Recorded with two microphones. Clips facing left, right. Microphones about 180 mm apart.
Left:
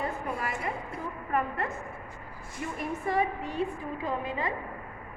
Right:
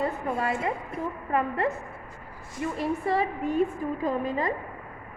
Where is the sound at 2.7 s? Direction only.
30° right (ahead or behind).